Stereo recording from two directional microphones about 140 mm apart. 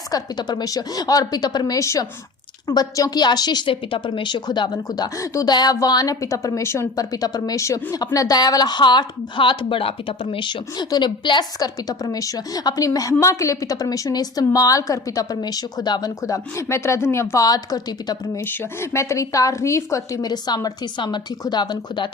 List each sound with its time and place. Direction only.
0.1 s a woman's voice: 30° left (ahead or behind)